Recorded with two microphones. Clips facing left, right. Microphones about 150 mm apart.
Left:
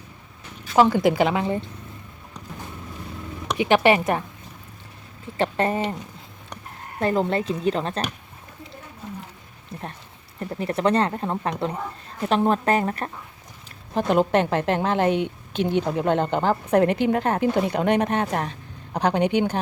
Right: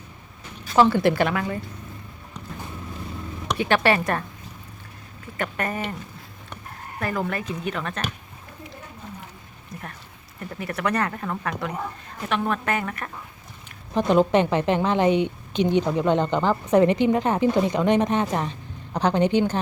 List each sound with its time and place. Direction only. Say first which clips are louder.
0.8 s speech: left 1 dB; 15° left (ahead or behind)
3.6 s speech: left 3 dB; 15° left (ahead or behind)
5.4 s speech: left 5 dB; 25° left (ahead or behind)
7.0 s speech: left 5 dB; 25° left (ahead or behind)
9.7 s speech: left 3 dB; 30° left (ahead or behind)
13.9 s a woman's voice: right 1 dB; 5° left (ahead or behind)